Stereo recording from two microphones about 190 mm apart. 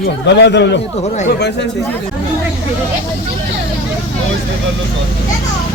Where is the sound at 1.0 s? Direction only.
35° left (ahead or behind).